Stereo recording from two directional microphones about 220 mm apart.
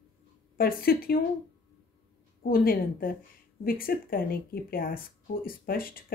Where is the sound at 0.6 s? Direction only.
40° left (ahead or behind).